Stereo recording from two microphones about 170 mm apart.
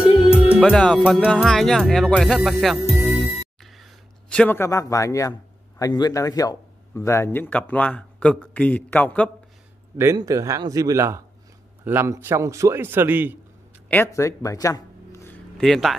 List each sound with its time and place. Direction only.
0.2 s music: 5° right (ahead or behind)
1.3 s speech: 5° left (ahead or behind)
9.9 s a man's voice: 20° right (ahead or behind)
13.8 s speech: 15° left (ahead or behind)